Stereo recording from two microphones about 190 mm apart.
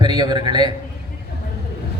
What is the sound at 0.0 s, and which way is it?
Speech, 20° right (ahead or behind).